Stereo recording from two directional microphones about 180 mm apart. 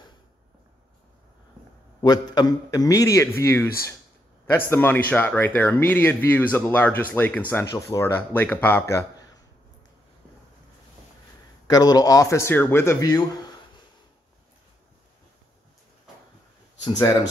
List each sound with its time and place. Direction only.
2.0 s a man's voice: 25° left (ahead or behind)
11.7 s speech: 20° left (ahead or behind)
16.8 s a man's voice: 20° left (ahead or behind)